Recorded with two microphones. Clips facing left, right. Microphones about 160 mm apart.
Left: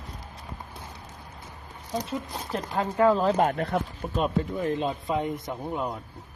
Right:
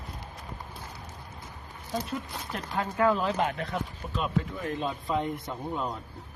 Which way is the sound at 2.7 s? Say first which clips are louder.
Left 4 dB; 30° left (ahead or behind).